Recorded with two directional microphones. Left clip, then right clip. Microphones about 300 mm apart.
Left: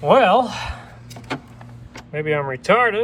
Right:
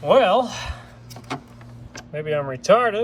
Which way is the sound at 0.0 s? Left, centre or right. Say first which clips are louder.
Left 2 dB; centre.